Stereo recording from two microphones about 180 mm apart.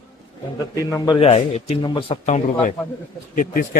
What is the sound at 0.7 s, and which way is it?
Speech, 20° left (ahead or behind).